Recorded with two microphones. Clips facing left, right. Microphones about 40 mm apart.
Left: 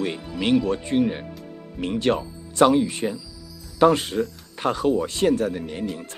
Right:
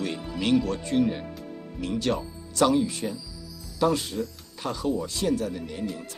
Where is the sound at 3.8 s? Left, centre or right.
Left.